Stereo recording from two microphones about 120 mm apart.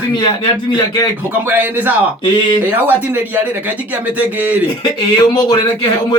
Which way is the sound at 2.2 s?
40° left (ahead or behind).